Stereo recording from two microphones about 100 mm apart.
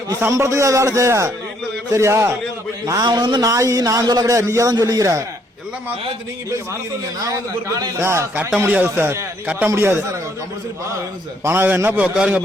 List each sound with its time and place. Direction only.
0.2 s a man's voice: 30° right (ahead or behind)
2.8 s a man's voice: 40° right (ahead or behind)
3.4 s a man's voice: 30° right (ahead or behind)
7.3 s a man's voice: 35° right (ahead or behind)
11.4 s a man's voice: 20° right (ahead or behind)